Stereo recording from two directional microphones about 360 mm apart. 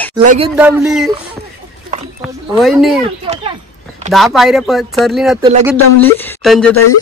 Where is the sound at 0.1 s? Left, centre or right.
Centre.